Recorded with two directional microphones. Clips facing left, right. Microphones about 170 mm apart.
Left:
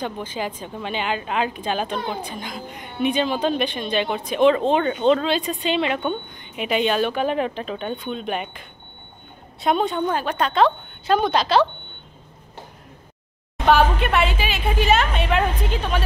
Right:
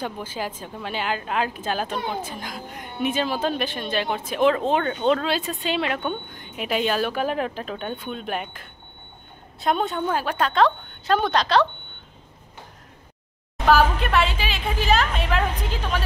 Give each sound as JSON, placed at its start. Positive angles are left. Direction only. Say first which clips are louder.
{"t": 0.0, "sound": "a woman's voice", "louder": "left 2 dB", "side_deg": -5}
{"t": 13.7, "sound": "a woman's voice", "louder": "left 1 dB", "side_deg": 0}